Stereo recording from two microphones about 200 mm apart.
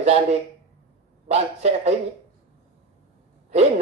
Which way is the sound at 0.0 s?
35° right (ahead or behind).